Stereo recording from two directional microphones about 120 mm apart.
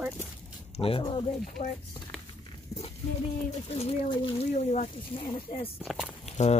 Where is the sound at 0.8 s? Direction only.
50° left (ahead or behind).